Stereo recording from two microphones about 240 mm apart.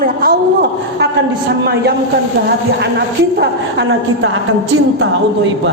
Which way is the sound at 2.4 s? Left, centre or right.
Right.